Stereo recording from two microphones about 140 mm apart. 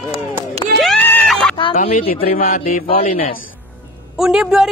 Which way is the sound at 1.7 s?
80° left.